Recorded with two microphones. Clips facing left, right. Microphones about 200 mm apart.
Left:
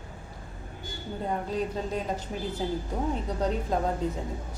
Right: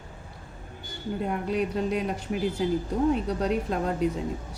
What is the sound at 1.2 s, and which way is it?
A woman's voice, 70° right (ahead or behind).